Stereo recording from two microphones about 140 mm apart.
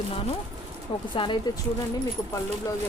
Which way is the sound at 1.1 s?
35° left (ahead or behind).